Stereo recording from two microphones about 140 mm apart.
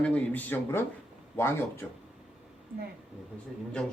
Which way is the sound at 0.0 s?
10° left (ahead or behind).